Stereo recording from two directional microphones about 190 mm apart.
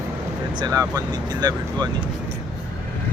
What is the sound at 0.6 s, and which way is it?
Speech, 20° right (ahead or behind).